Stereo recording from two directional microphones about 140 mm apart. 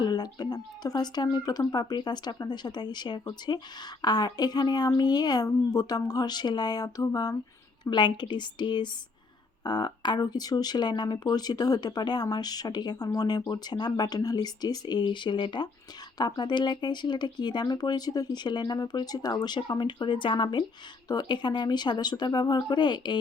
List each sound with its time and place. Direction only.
0.0 s speech: 30° left (ahead or behind)